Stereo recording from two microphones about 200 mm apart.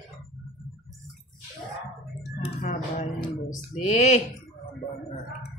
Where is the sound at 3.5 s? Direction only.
35° left (ahead or behind).